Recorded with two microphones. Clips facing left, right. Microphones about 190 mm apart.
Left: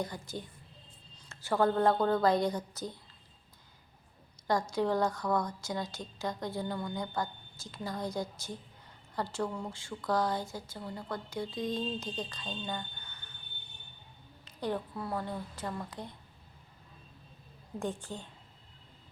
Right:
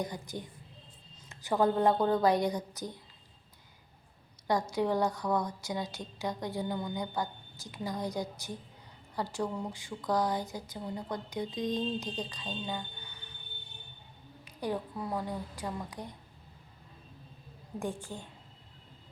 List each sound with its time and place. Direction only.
0.0 s a woman's voice: 15° right (ahead or behind)
4.7 s a woman's voice: 15° right (ahead or behind)
14.4 s a woman's voice: 15° right (ahead or behind)
17.7 s a woman's voice: 10° right (ahead or behind)